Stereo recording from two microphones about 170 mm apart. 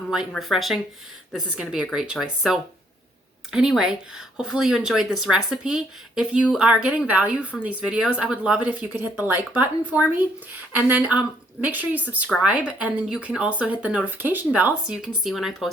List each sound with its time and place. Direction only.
0.1 s speech: centre (ahead or behind)